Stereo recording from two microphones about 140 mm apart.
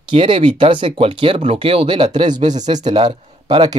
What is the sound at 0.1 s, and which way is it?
Speech, 40° right (ahead or behind).